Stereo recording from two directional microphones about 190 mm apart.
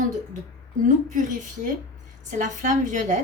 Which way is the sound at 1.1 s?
40° right (ahead or behind).